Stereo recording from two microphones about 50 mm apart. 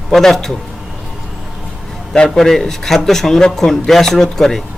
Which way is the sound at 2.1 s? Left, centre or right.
Centre.